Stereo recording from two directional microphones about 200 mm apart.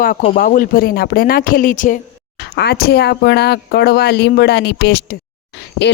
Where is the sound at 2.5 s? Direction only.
55° left (ahead or behind).